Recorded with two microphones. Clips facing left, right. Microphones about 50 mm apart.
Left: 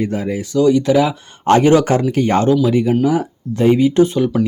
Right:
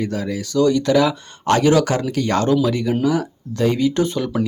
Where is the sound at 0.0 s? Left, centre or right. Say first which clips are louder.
Left 3 dB; left.